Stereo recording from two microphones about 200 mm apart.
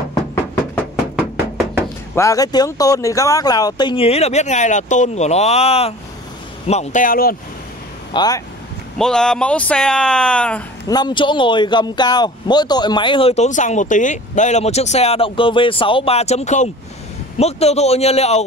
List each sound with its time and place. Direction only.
1.1 s a sound: 10° right (ahead or behind)
2.1 s a man's voice: 15° left (ahead or behind); by 7.3 s 45° left (ahead or behind)
8.1 s speech: 20° left (ahead or behind)
8.9 s speech: 5° left (ahead or behind)
10.9 s a man's voice: 20° left (ahead or behind)